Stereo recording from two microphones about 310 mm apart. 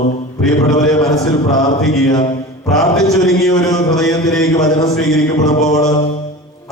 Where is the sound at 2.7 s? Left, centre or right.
Centre.